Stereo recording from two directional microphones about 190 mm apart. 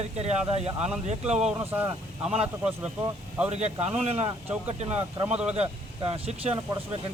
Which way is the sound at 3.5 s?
35° right (ahead or behind).